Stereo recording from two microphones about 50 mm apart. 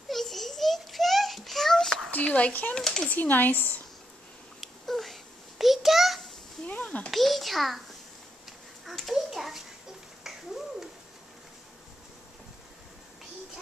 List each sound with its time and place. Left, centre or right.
0.1 s a sound: centre
2.0 s speech: left
2.8 s speech: centre
3.1 s speech: left
4.6 s a sound: centre
6.6 s speech: left
7.1 s a child's voice: centre
8.8 s a sound: centre
10.2 s finger snapping: centre